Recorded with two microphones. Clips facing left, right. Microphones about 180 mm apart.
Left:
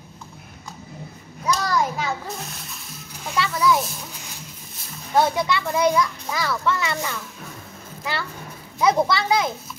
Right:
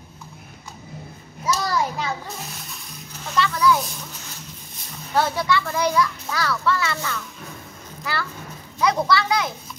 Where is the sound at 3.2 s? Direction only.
10° left (ahead or behind).